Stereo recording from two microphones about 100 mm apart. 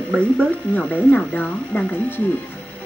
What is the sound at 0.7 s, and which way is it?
Speech, 15° left (ahead or behind).